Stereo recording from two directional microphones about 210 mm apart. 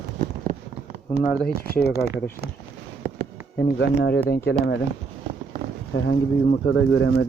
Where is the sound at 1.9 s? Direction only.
15° right (ahead or behind).